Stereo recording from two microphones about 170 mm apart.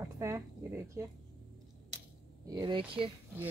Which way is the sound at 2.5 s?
25° right (ahead or behind).